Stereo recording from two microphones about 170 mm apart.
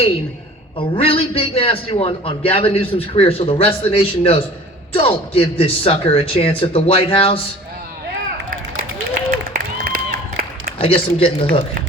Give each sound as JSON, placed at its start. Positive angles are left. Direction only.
{"t": 0.8, "sound": "a man's voice", "side_deg": 35}
{"t": 9.5, "sound": "a sound", "side_deg": -55}
{"t": 10.8, "sound": "a man's voice", "side_deg": 35}